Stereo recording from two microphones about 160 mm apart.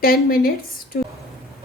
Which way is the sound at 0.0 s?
65° left (ahead or behind).